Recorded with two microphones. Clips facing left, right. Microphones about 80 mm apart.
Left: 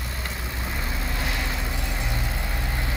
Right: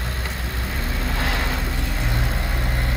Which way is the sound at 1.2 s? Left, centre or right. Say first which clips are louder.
Right 6 dB; right.